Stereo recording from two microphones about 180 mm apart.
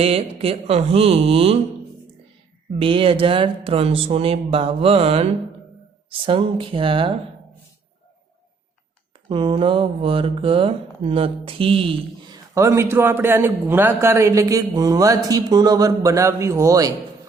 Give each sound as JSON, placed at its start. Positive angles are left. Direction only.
{"t": 0.0, "sound": "speech", "side_deg": -35}
{"t": 2.8, "sound": "speech", "side_deg": -30}
{"t": 9.3, "sound": "speech", "side_deg": -30}
{"t": 12.5, "sound": "a man's voice", "side_deg": -15}